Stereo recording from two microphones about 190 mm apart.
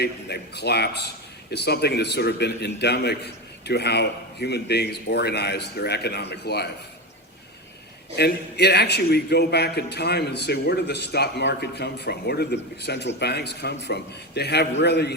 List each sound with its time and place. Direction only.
0.0 s a man's voice: 60° left (ahead or behind)
8.1 s a man's voice: 60° left (ahead or behind)